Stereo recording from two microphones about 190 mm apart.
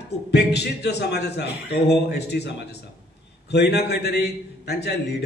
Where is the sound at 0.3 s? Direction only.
60° left (ahead or behind).